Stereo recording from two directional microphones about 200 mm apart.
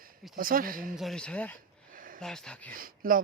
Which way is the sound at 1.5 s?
45° right (ahead or behind).